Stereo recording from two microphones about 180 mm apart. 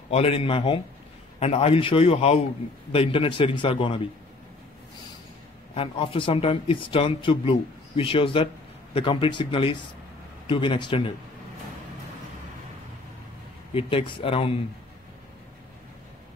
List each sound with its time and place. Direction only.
0.1 s a man's voice: 35° left (ahead or behind)
5.8 s speech: 30° left (ahead or behind)
13.7 s a man's voice: 30° left (ahead or behind)